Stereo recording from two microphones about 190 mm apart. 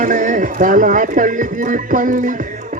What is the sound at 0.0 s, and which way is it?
Speech, 40° right (ahead or behind).